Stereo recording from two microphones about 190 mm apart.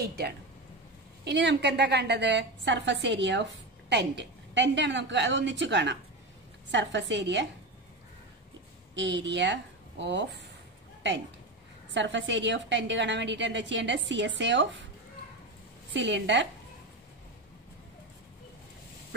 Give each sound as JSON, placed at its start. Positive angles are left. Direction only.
{"t": 1.2, "sound": "a woman's voice", "side_deg": -65}
{"t": 8.9, "sound": "a woman's voice", "side_deg": -70}
{"t": 11.0, "sound": "a sound", "side_deg": -70}
{"t": 11.9, "sound": "a woman's voice", "side_deg": -70}
{"t": 15.9, "sound": "a woman's voice", "side_deg": -70}